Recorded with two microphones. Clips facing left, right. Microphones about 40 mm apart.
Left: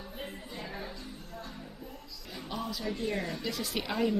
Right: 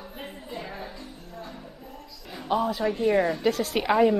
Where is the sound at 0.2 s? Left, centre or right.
Centre.